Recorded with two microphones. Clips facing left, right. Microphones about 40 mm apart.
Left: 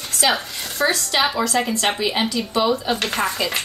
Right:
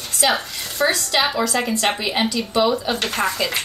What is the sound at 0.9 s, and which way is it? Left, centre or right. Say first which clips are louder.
A woman's voice: even; centre.